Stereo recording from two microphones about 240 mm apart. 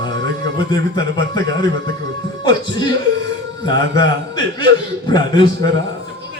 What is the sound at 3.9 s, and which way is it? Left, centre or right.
Speech, centre.